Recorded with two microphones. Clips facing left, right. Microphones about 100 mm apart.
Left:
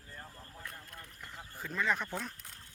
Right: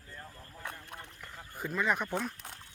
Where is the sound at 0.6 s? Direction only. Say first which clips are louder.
Right 6 dB; 70° right (ahead or behind).